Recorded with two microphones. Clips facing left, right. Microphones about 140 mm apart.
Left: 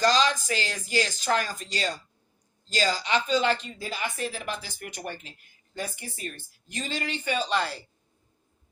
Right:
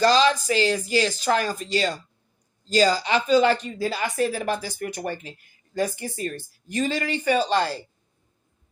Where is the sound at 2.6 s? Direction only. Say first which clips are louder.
Right 7 dB; 40° right (ahead or behind).